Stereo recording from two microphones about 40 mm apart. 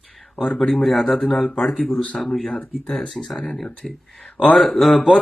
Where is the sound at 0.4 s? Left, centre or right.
Left.